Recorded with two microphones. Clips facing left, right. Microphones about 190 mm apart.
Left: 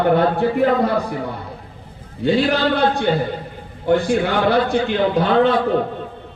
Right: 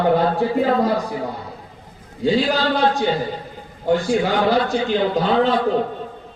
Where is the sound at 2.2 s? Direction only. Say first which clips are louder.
Left 1 dB; 60° left (ahead or behind).